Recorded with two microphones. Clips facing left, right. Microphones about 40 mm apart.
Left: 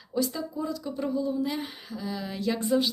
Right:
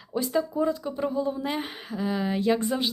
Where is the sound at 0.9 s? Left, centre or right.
Right.